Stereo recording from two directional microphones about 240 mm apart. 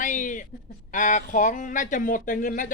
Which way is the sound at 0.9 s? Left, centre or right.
Left.